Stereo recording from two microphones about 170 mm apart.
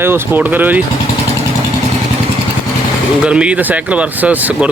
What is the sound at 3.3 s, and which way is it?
Speech, 5° right (ahead or behind).